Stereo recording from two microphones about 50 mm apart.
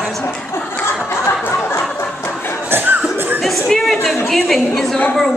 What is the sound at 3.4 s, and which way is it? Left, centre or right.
Chatter, centre.